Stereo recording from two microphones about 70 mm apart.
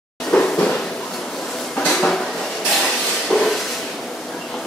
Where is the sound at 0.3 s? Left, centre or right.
Centre.